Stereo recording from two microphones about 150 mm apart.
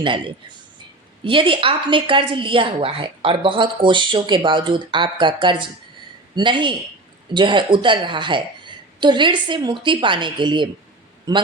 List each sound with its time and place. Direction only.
0.0 s a woman's voice: 35° right (ahead or behind)